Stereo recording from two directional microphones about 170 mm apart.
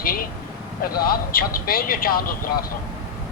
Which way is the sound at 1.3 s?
60° left (ahead or behind).